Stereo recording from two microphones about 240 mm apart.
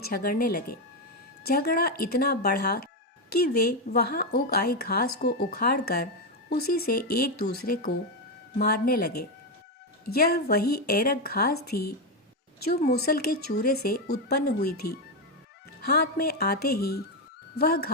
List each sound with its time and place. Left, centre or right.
0.0 s speech: left
10.1 s speech: left